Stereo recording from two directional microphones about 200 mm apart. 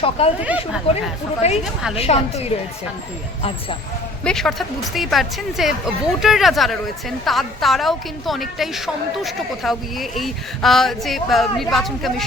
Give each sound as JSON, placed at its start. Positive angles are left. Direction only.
{"t": 0.4, "sound": "speech", "side_deg": -5}
{"t": 1.4, "sound": "a woman's voice", "side_deg": 30}
{"t": 4.2, "sound": "a woman's voice", "side_deg": 5}